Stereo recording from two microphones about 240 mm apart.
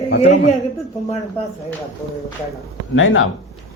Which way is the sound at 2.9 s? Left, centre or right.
Left.